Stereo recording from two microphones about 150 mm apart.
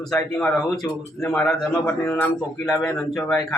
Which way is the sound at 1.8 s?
15° left (ahead or behind).